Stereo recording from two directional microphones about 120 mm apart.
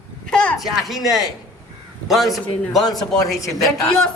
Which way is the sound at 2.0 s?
Centre (ahead or behind).